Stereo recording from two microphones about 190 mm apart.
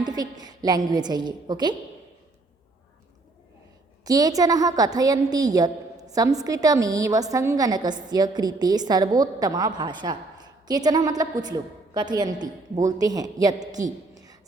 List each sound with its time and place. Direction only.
0.0 s a woman's voice: 20° right (ahead or behind)
4.0 s a woman's voice: 20° right (ahead or behind)
14.1 s a sound: 20° right (ahead or behind)